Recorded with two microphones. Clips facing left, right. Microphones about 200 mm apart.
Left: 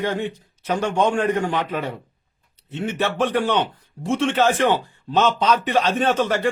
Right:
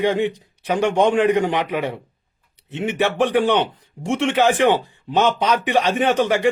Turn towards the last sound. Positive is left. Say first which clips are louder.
# right 2 dB
turn(degrees=-15)  # may be behind; listen again after turning